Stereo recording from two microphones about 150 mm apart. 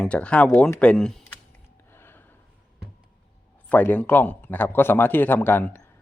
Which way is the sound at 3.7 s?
10° left (ahead or behind).